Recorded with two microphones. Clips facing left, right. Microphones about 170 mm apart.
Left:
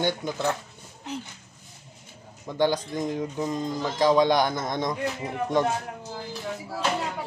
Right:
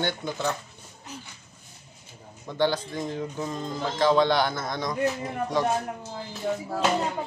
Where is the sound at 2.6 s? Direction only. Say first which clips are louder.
Left 1 dB; 15° left (ahead or behind).